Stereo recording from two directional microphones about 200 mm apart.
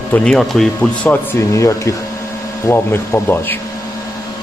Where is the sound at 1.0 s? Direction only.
15° left (ahead or behind).